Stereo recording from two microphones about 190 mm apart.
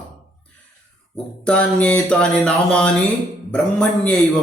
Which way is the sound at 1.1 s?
5° left (ahead or behind).